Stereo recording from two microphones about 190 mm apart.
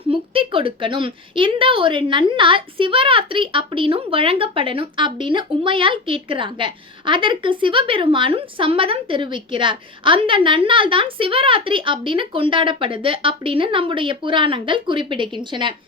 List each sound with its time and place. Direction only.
0.1 s a woman's voice: 30° right (ahead or behind)